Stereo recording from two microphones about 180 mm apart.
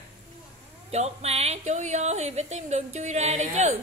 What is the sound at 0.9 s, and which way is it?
A woman's voice, 35° right (ahead or behind).